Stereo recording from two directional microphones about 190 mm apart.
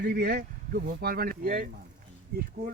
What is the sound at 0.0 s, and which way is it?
Speech, 60° right (ahead or behind).